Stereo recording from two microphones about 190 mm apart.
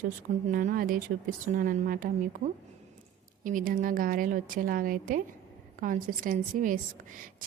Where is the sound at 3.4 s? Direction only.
45° right (ahead or behind).